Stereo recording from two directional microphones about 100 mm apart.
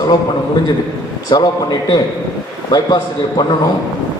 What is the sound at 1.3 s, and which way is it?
Speech, 50° left (ahead or behind).